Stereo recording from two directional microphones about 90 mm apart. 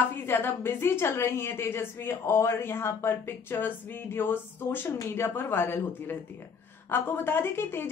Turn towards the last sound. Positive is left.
turn(degrees=25)  # may be behind; listen again after turning